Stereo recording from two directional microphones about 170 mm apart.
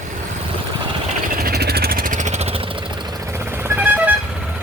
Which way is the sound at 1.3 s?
65° right (ahead or behind).